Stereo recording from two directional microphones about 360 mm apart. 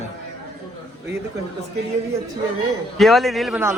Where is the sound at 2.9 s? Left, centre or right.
Centre.